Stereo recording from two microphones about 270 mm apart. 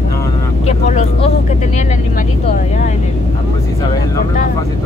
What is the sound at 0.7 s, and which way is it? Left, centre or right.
Vehicle, left.